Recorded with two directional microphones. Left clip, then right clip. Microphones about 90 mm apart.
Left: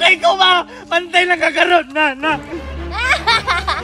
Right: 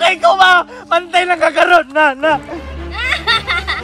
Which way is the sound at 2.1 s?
90° right.